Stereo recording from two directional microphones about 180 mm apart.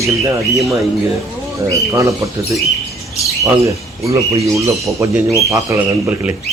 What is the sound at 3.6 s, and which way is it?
Speech, 15° right (ahead or behind).